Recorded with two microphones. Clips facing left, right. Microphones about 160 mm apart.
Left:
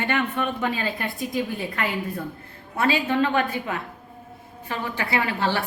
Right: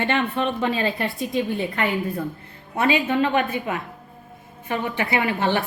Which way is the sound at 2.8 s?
15° right (ahead or behind).